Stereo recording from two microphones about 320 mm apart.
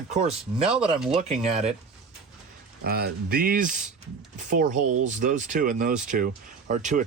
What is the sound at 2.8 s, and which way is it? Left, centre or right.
Speech, right.